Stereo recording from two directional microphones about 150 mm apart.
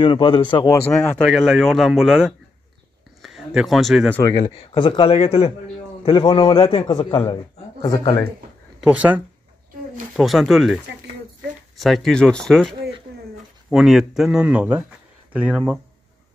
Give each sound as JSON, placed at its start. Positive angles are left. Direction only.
{"t": 0.0, "sound": "speech", "side_deg": 30}
{"t": 0.9, "sound": "speech", "side_deg": 5}
{"t": 4.2, "sound": "speech", "side_deg": 25}
{"t": 6.0, "sound": "speech", "side_deg": 30}
{"t": 8.8, "sound": "speech", "side_deg": -10}